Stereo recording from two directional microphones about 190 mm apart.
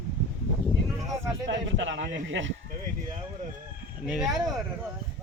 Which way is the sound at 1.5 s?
75° right (ahead or behind).